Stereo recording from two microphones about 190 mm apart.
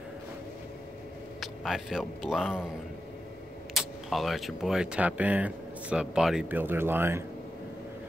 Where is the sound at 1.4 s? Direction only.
Centre (ahead or behind).